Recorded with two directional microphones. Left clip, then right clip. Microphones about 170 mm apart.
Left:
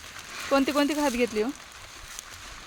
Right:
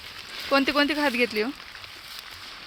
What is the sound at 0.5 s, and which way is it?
Speech, 5° left (ahead or behind).